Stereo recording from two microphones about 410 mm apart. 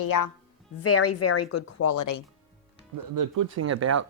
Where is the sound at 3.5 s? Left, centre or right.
Right.